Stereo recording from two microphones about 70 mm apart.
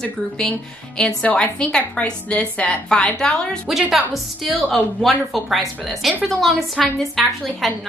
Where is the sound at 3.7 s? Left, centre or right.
Centre.